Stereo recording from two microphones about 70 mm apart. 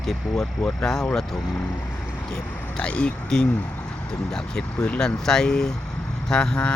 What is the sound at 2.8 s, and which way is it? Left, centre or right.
Speech, centre.